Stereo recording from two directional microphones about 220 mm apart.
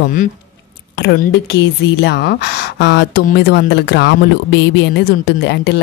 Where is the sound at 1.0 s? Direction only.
50° left (ahead or behind).